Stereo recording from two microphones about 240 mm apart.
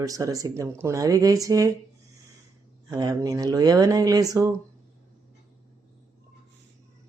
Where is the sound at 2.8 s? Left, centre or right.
Centre.